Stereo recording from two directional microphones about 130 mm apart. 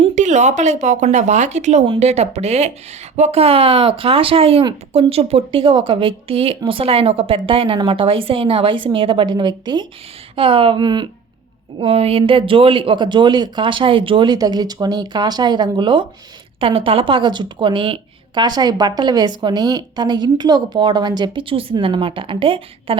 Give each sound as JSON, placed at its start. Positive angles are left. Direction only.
{"t": 0.2, "sound": "speech", "side_deg": -65}
{"t": 11.8, "sound": "speech", "side_deg": -50}